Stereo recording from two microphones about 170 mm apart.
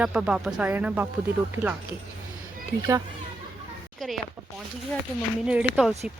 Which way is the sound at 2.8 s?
20° right (ahead or behind).